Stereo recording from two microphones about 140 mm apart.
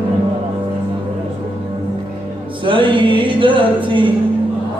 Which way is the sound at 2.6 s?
35° right (ahead or behind).